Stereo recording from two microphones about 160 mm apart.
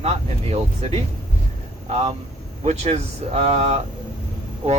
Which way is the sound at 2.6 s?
40° right (ahead or behind).